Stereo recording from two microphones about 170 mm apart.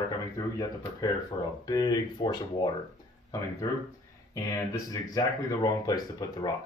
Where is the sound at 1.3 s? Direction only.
30° left (ahead or behind).